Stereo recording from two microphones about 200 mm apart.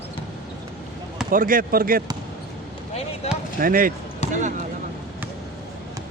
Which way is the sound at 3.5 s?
45° right (ahead or behind).